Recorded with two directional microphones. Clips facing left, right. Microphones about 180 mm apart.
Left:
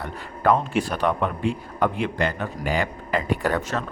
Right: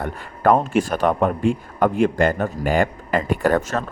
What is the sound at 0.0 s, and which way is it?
A man's voice, 50° right (ahead or behind).